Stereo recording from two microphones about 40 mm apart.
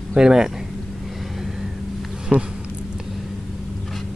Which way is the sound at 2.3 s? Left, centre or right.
Right.